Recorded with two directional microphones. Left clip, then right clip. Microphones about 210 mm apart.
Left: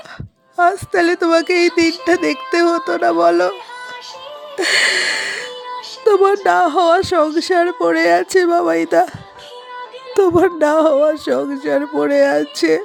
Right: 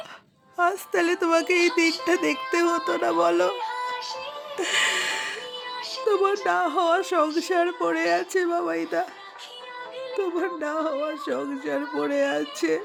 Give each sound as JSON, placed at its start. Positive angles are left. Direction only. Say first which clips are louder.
{"t": 0.5, "sound": "speech", "louder": "left 9 dB", "side_deg": 20}
{"t": 4.5, "sound": "music", "louder": "left 9 dB", "side_deg": 25}
{"t": 6.1, "sound": "speech", "louder": "left 10 dB", "side_deg": 30}
{"t": 10.2, "sound": "speech", "louder": "left 15 dB", "side_deg": 40}